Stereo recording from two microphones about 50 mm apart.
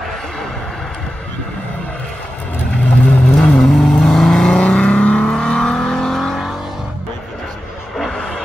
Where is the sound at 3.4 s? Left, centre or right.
Centre.